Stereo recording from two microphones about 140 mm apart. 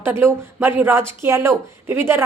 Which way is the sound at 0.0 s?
15° right (ahead or behind).